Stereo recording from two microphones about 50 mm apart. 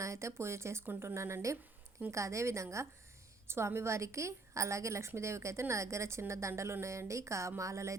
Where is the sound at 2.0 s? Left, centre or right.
Right.